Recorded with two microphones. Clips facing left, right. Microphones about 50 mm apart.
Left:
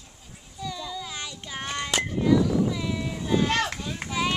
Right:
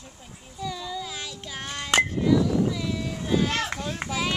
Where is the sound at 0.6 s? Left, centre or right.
Centre.